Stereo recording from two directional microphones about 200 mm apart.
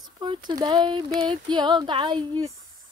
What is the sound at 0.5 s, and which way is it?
Female singing, 20° right (ahead or behind).